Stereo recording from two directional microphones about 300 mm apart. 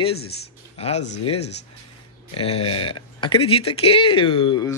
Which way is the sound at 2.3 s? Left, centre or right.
Centre.